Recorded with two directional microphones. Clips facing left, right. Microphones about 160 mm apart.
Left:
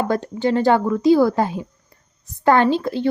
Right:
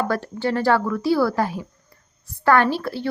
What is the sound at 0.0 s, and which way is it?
A woman's voice, 20° left (ahead or behind).